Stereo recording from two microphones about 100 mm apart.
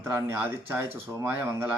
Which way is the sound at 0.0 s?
25° right (ahead or behind).